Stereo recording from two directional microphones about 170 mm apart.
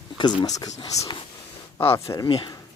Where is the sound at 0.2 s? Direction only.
25° left (ahead or behind).